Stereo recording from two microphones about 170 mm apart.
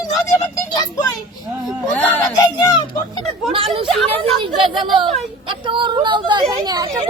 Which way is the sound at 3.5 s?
30° right (ahead or behind).